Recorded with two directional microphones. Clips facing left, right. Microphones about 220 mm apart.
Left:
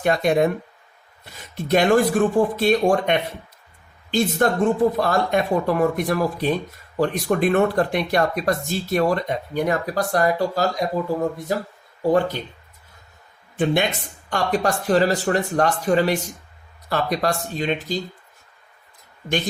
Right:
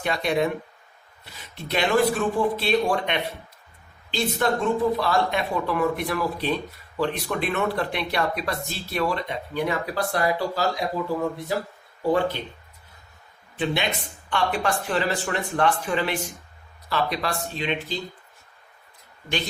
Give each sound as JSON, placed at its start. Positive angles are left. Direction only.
{"t": 0.0, "sound": "speech", "side_deg": 45}
{"t": 14.3, "sound": "speech", "side_deg": 40}